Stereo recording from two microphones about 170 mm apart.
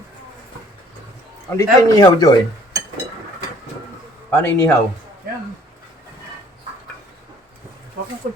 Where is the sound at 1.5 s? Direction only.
20° left (ahead or behind).